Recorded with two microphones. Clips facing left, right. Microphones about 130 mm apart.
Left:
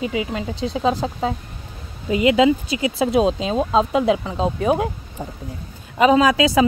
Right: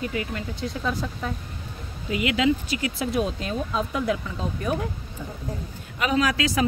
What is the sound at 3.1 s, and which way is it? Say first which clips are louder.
Speech: left 8 dB; 90° left.